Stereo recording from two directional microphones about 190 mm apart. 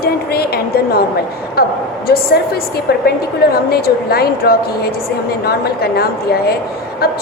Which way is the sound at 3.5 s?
55° left (ahead or behind).